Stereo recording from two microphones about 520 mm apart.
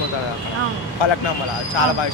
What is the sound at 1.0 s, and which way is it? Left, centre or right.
Speech, left.